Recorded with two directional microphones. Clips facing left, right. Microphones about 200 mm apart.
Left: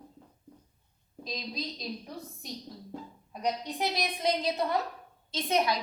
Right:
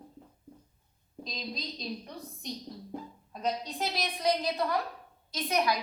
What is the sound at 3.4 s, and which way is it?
A woman's voice, 15° left (ahead or behind).